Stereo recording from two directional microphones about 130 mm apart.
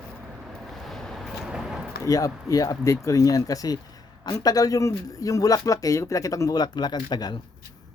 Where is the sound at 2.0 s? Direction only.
25° left (ahead or behind).